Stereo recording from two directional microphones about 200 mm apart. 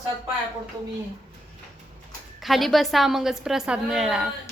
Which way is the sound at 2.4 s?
Centre (ahead or behind).